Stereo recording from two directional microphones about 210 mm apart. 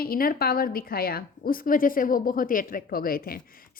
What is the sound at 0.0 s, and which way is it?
A woman's voice, 45° left (ahead or behind).